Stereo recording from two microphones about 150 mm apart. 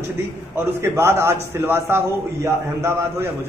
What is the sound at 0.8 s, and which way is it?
A man's voice, 15° right (ahead or behind).